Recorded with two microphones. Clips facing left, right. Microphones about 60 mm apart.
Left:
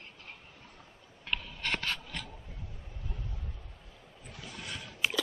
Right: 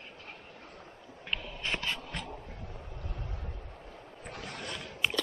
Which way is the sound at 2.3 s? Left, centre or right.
Right.